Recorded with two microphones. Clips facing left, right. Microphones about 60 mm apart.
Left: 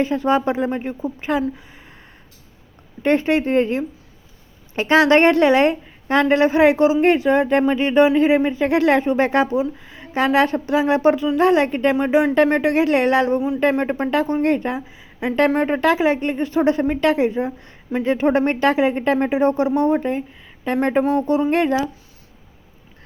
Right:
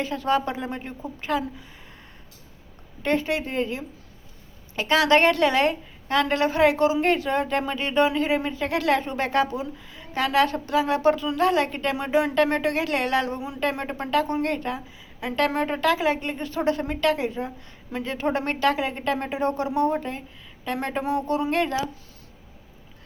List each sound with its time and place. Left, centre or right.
0.0 s a woman's voice: left
3.0 s a woman's voice: left